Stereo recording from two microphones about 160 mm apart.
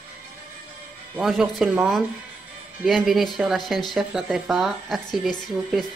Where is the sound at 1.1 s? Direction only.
Centre (ahead or behind).